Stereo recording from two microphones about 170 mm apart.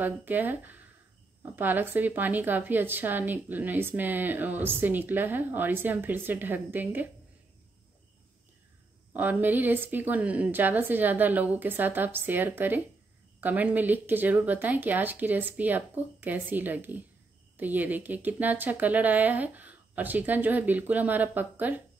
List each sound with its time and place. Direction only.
0.0 s a woman's voice: 10° right (ahead or behind)
9.1 s a woman's voice: 10° right (ahead or behind)